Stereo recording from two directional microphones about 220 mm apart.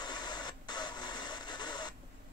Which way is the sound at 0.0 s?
20° left (ahead or behind).